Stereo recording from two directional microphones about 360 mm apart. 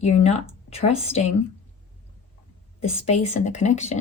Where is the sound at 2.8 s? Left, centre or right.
Centre.